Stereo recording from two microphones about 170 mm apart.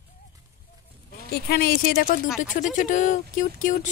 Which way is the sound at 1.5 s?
60° left (ahead or behind).